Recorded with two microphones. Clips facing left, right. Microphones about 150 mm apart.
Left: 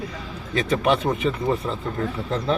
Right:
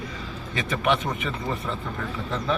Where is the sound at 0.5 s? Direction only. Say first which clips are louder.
Left 4 dB; 35° left (ahead or behind).